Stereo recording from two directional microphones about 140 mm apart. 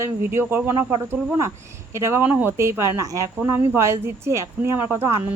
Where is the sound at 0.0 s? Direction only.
15° right (ahead or behind).